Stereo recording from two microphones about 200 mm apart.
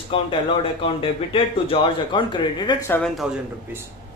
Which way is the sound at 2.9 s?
5° left (ahead or behind).